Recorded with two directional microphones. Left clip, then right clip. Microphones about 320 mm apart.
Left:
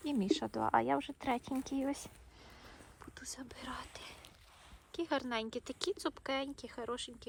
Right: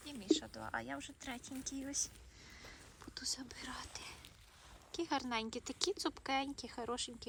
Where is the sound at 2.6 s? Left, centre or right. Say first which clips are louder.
Even; centre.